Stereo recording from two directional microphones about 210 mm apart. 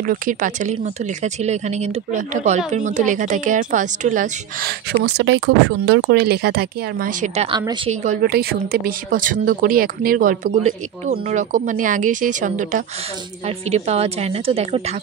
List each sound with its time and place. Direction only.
0.0 s a woman's voice: 40° right (ahead or behind)
7.5 s a woman's voice: 20° right (ahead or behind)
7.9 s a woman's voice: 35° right (ahead or behind)